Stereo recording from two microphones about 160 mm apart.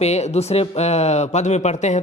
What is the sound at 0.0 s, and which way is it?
Speech, 45° left (ahead or behind).